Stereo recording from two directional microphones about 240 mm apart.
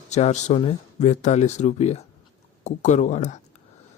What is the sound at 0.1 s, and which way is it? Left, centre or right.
Speech, left.